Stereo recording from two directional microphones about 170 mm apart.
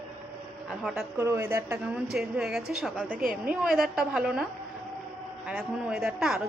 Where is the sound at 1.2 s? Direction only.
15° right (ahead or behind).